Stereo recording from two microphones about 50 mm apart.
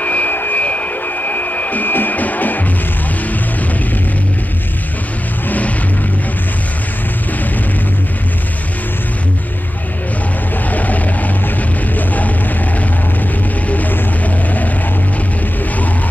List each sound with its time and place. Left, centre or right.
0.0 s a sound: left
0.4 s music: left
10.7 s vehicle: left
12.1 s music: left
13.7 s music: left